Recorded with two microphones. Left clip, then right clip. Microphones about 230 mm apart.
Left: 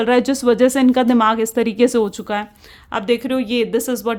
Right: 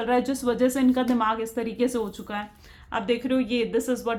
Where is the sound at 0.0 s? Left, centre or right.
Left.